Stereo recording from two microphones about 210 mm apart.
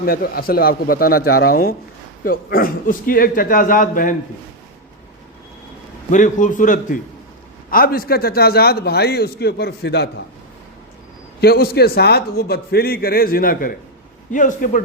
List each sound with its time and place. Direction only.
0.0 s a man's voice: 45° left (ahead or behind)
6.1 s a man's voice: 35° left (ahead or behind); by 10.1 s 50° left (ahead or behind)
11.3 s a man's voice: 50° left (ahead or behind)